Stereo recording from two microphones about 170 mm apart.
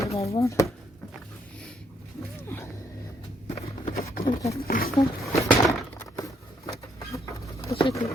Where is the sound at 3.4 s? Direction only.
40° left (ahead or behind).